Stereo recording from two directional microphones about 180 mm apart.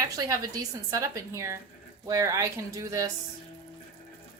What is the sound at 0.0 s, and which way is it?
A woman's voice, 20° right (ahead or behind).